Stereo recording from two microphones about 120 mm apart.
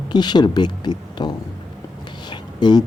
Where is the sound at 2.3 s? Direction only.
35° left (ahead or behind).